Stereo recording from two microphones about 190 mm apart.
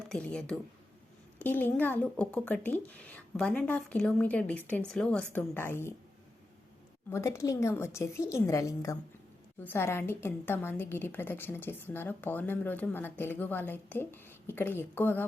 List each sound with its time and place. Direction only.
0.1 s a woman's voice: 5° left (ahead or behind)
7.1 s a woman's voice: 15° left (ahead or behind)